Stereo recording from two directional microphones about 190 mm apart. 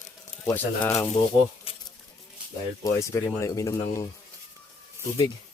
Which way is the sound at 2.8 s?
15° left (ahead or behind).